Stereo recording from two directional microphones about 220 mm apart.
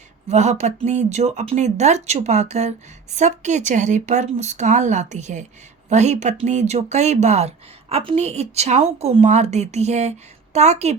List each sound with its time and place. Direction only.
0.3 s speech: 30° right (ahead or behind)